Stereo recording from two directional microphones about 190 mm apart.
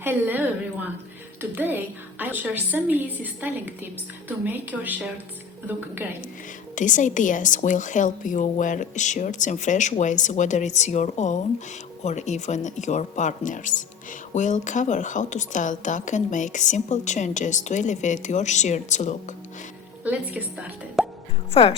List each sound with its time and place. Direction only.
0.0 s a woman's voice: 10° right (ahead or behind)
4.4 s a woman's voice: 10° right (ahead or behind)
6.7 s speech: 40° left (ahead or behind)
21.0 s plop: centre (ahead or behind)
21.5 s speech: 30° left (ahead or behind)